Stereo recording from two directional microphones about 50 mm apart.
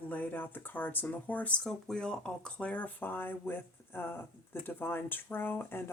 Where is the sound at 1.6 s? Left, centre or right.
Centre.